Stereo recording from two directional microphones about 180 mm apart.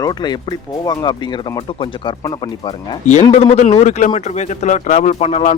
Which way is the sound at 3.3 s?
40° left (ahead or behind).